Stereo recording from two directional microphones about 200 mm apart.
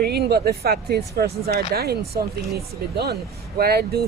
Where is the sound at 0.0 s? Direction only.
55° right (ahead or behind).